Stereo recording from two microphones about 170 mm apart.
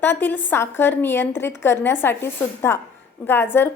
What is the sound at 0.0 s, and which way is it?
A woman's voice, 10° left (ahead or behind).